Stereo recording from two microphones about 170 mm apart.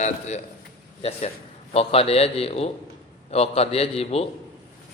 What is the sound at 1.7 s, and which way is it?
A man's voice, 35° left (ahead or behind).